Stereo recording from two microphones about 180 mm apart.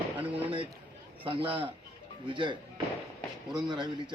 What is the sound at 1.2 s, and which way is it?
Speech, 25° right (ahead or behind).